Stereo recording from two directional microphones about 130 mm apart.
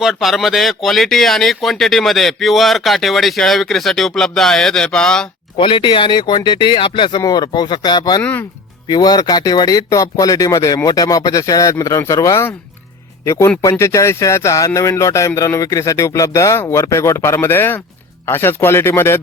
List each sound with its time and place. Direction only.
0.0 s speech: 5° right (ahead or behind)
5.5 s speech: 40° left (ahead or behind)
8.2 s speech: 15° left (ahead or behind)
8.9 s speech: 30° left (ahead or behind)